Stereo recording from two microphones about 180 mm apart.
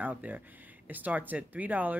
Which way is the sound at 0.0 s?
10° right (ahead or behind).